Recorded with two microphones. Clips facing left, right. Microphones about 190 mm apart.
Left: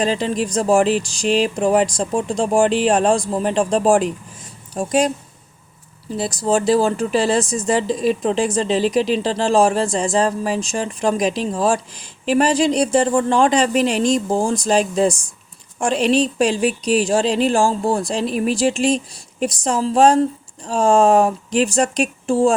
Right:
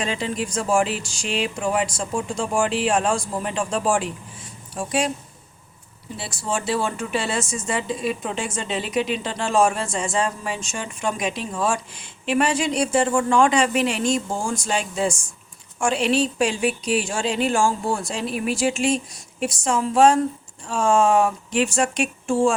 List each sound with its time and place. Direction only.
0.0 s speech: 35° left (ahead or behind)
6.1 s speech: 40° left (ahead or behind)